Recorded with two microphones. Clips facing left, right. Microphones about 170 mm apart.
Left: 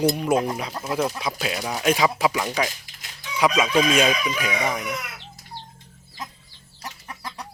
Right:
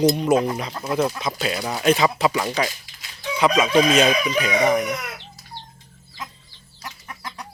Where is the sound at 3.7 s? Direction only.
35° right (ahead or behind).